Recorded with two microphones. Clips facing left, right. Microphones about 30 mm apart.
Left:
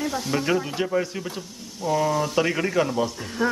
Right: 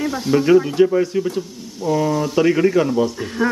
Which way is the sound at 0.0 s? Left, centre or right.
Centre.